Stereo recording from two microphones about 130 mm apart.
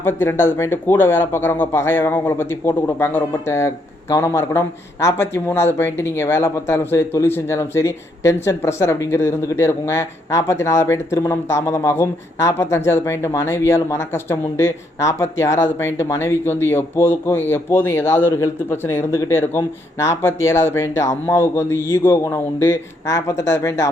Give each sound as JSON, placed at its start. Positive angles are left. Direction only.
{"t": 0.0, "sound": "speech", "side_deg": 15}